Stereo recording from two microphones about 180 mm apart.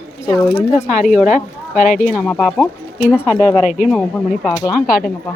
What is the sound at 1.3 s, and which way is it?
Speech, 40° left (ahead or behind).